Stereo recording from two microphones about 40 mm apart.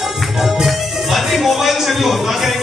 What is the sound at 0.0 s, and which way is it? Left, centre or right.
Music, centre.